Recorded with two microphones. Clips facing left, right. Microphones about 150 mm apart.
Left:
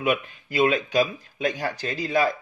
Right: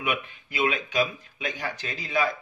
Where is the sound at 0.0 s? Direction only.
40° left (ahead or behind).